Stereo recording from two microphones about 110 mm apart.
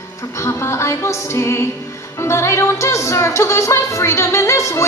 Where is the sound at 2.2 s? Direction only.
25° left (ahead or behind).